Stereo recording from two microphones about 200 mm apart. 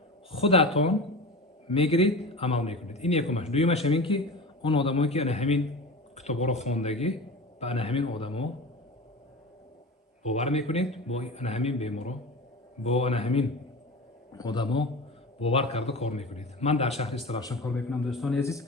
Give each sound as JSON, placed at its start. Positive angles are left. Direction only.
{"t": 0.3, "sound": "a man's voice", "side_deg": 30}
{"t": 10.2, "sound": "a man's voice", "side_deg": 35}
{"t": 17.4, "sound": "a man's voice", "side_deg": 15}
{"t": 17.7, "sound": "speech", "side_deg": 0}
{"t": 18.3, "sound": "a man's voice", "side_deg": 15}